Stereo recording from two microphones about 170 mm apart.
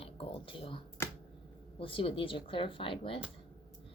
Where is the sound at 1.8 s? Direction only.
30° left (ahead or behind).